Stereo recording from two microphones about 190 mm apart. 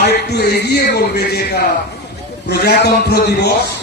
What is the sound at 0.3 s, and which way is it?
A man's voice, 60° left (ahead or behind).